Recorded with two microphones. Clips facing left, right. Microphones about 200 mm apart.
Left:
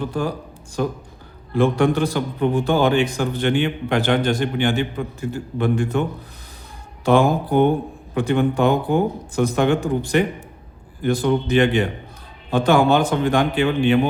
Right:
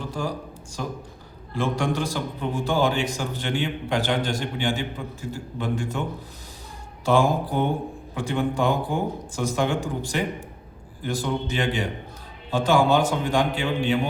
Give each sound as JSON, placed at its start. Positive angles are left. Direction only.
{"t": 0.1, "sound": "a man's voice", "side_deg": 60}